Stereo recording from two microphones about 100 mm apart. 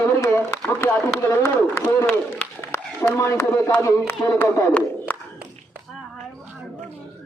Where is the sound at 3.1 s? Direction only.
30° left (ahead or behind).